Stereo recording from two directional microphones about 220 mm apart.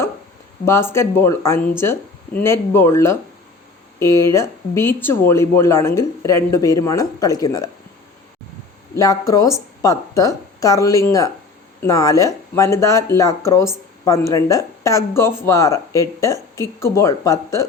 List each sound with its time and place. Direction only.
0.6 s speech: 10° left (ahead or behind)
9.0 s speech: 15° left (ahead or behind)